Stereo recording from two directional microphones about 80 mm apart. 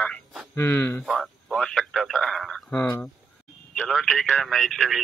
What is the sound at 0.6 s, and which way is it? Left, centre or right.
Speech, left.